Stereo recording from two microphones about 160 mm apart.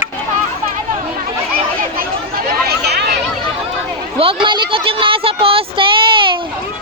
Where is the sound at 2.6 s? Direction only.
90° right.